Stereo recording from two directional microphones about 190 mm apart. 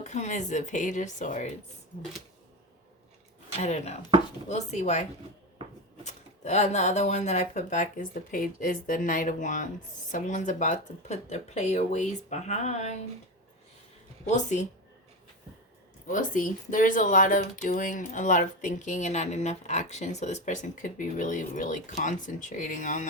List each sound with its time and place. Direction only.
0.0 s speech: 40° left (ahead or behind)
3.6 s speech: 35° left (ahead or behind)
14.3 s speech: 40° left (ahead or behind)
16.0 s speech: 45° left (ahead or behind)